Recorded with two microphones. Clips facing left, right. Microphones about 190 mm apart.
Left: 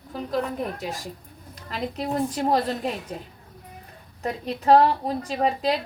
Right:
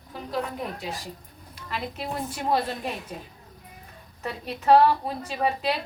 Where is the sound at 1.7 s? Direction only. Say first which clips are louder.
Left 4 dB; 40° left (ahead or behind).